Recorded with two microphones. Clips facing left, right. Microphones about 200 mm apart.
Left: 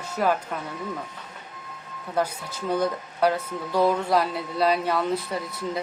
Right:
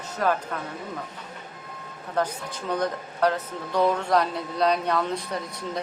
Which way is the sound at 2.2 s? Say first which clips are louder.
Left 1 dB; 10° left (ahead or behind).